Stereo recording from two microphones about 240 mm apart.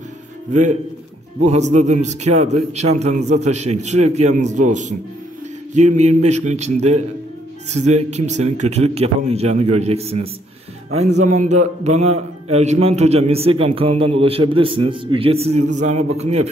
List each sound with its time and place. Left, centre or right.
0.5 s a man's voice: right